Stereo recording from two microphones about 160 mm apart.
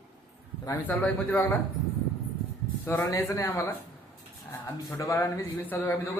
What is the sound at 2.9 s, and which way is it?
Speech, 15° left (ahead or behind).